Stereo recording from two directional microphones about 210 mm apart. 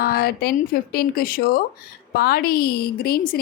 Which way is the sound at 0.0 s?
45° left (ahead or behind).